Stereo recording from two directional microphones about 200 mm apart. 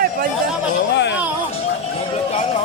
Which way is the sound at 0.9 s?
60° left (ahead or behind).